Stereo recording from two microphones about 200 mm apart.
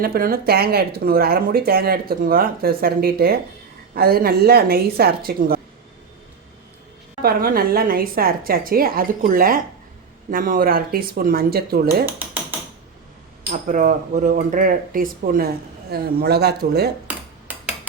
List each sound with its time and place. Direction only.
0.0 s speech: 45° right (ahead or behind)
7.2 s speech: 50° right (ahead or behind)
12.0 s mechanisms: 10° right (ahead or behind)
13.5 s speech: 40° right (ahead or behind)